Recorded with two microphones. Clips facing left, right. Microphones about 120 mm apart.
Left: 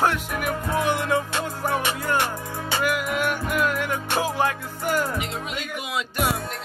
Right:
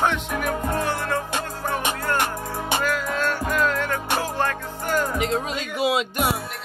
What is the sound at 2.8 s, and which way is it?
Music, 15° left (ahead or behind).